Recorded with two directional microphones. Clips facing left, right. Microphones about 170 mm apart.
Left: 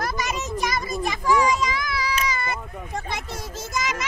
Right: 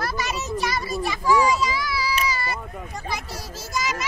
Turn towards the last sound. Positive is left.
turn(degrees=20)  # may be behind; listen again after turning